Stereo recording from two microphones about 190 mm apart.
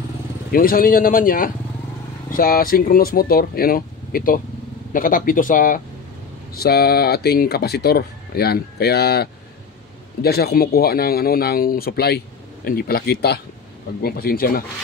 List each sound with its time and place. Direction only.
0.5 s speech: 50° left (ahead or behind)